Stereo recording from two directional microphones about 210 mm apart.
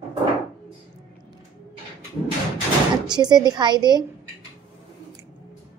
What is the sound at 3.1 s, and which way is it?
Speech, 20° right (ahead or behind).